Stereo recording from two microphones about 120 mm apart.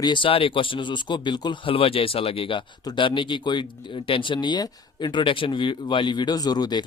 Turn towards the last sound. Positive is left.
turn(degrees=35)  # may be behind; listen again after turning